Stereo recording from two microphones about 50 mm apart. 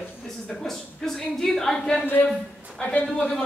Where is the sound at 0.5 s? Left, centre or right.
Centre.